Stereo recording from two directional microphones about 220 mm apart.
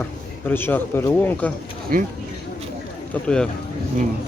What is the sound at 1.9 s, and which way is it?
Speech, 40° right (ahead or behind).